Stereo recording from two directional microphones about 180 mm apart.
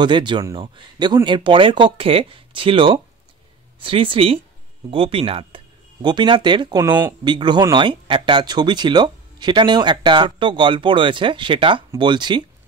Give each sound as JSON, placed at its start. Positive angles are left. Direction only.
{"t": 0.0, "sound": "speech", "side_deg": -25}